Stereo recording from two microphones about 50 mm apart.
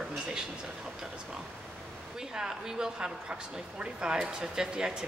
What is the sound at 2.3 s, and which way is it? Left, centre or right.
Speech, centre.